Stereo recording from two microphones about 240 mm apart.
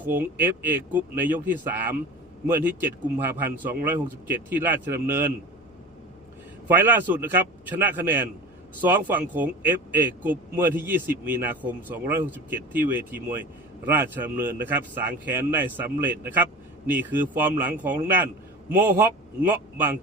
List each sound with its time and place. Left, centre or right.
0.0 s a man's voice: centre
6.7 s a man's voice: centre
18.8 s a man's voice: centre